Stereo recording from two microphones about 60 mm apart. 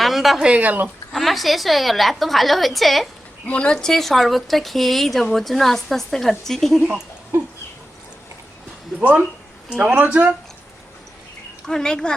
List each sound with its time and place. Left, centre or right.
0.0 s a sound: centre
0.4 s speech: right
1.1 s speech: centre
3.4 s speech: centre
9.0 s speech: right
9.6 s speech: centre
9.9 s speech: right
11.6 s speech: centre